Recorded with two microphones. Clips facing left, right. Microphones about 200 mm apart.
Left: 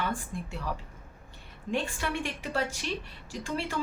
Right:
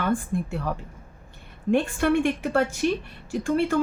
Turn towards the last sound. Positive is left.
turn(degrees=-50)  # may be behind; listen again after turning